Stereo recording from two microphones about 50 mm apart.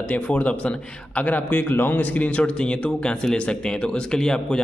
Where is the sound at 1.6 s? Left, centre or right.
Left.